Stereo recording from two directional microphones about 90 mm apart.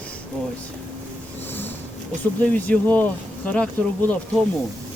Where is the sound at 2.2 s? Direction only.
15° left (ahead or behind).